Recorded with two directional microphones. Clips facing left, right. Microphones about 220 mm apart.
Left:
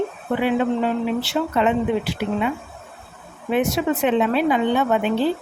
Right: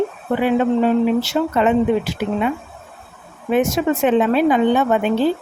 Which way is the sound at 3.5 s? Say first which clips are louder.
Right 3 dB; 45° right (ahead or behind).